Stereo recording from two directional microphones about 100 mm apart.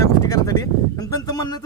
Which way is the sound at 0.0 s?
35° left (ahead or behind).